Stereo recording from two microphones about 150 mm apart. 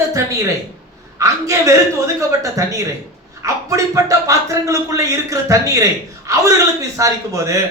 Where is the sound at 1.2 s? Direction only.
20° right (ahead or behind).